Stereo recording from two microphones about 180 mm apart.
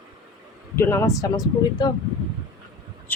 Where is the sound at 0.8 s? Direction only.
15° left (ahead or behind).